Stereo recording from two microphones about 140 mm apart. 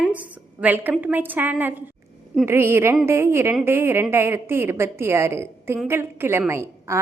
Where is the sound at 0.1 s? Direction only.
10° right (ahead or behind).